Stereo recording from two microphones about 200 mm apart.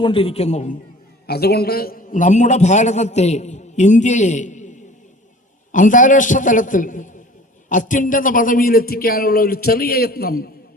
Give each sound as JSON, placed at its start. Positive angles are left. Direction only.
{"t": 0.0, "sound": "a man's voice", "side_deg": 25}
{"t": 1.3, "sound": "a man's voice", "side_deg": 50}